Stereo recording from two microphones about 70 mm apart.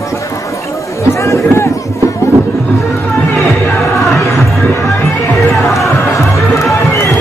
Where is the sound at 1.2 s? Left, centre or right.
Left.